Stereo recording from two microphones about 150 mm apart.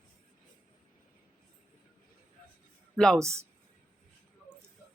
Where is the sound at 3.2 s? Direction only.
20° right (ahead or behind).